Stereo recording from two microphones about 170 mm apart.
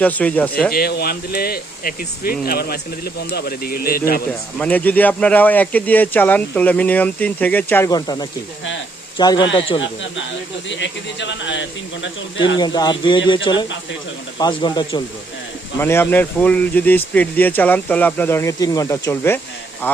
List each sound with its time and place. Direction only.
0.0 s speech: 10° left (ahead or behind)
0.7 s speech: 65° left (ahead or behind)
4.5 s speech: 10° left (ahead or behind); by 9.8 s 30° left (ahead or behind)
10.7 s speech: 90° left
12.5 s speech: 25° left (ahead or behind)
15.8 s speech: 15° left (ahead or behind)